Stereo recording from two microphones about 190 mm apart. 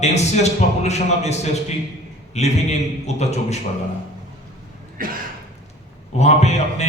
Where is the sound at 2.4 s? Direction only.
35° left (ahead or behind).